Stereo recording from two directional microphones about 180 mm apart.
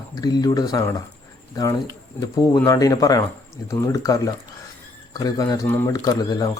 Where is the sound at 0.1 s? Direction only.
20° left (ahead or behind).